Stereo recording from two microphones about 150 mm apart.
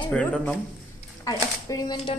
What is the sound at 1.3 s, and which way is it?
Speech, 25° left (ahead or behind).